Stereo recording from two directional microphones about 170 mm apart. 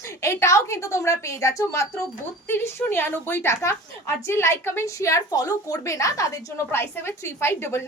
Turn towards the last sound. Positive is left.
turn(degrees=15)  # may be behind; listen again after turning